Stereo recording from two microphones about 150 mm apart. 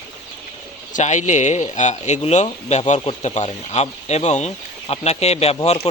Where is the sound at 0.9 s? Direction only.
55° left (ahead or behind).